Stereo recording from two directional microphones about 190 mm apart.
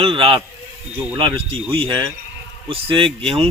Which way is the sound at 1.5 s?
25° right (ahead or behind).